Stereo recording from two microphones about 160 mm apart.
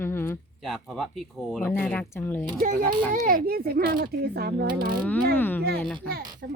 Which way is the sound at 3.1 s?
65° right (ahead or behind).